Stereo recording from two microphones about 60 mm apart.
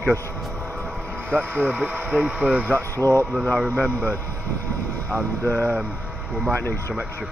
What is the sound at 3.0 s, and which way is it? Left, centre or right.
Speech, right.